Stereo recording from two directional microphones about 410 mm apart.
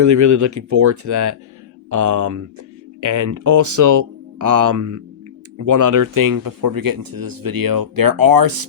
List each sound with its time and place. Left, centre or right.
0.0 s speech: right